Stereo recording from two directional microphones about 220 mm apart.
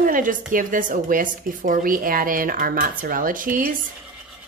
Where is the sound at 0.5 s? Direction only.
35° right (ahead or behind).